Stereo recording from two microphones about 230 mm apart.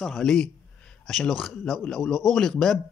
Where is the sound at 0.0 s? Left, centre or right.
Centre.